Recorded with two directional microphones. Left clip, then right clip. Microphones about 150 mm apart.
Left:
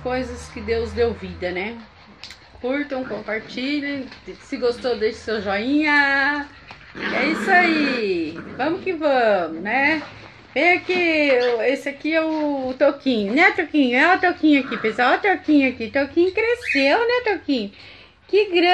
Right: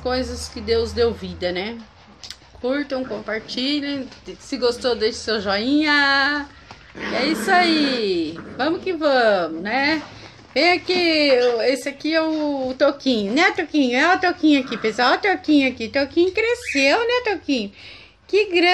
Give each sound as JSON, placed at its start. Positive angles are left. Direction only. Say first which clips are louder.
{"t": 0.0, "sound": "a woman's voice", "louder": "right 2 dB", "side_deg": -10}